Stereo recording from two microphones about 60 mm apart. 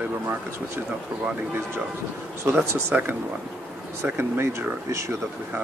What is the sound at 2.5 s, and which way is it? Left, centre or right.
Speech, right.